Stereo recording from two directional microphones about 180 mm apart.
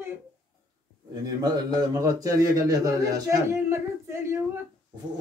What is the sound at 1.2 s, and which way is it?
A man's voice, 20° right (ahead or behind).